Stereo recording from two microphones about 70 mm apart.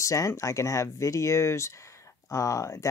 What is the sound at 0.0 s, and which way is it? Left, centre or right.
Speech, left.